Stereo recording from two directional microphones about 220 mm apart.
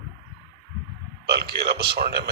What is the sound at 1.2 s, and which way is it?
Speech, 45° right (ahead or behind).